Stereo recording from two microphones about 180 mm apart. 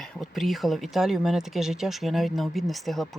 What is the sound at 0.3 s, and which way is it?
Speech, centre (ahead or behind).